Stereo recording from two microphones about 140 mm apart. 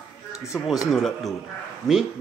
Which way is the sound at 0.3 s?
20° left (ahead or behind).